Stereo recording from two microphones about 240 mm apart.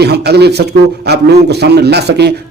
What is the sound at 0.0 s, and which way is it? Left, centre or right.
A man's voice, right.